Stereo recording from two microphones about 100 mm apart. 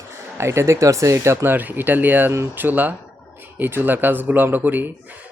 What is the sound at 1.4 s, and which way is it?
Speech, 20° right (ahead or behind).